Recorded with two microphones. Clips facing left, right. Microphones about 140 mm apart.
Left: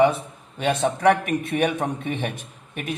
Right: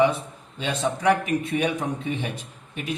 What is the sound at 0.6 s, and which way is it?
A man's voice, 60° left (ahead or behind).